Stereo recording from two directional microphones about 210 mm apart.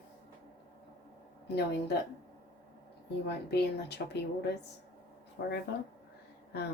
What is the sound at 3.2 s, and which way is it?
Speech, 50° left (ahead or behind).